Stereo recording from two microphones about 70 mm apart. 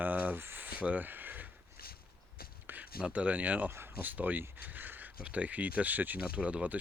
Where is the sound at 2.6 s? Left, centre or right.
Right.